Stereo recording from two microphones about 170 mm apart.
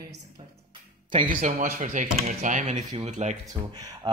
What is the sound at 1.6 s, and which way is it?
Speech, 50° right (ahead or behind).